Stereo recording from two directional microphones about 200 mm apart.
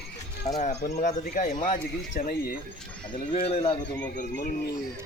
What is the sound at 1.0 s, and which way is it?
Speech, 40° left (ahead or behind).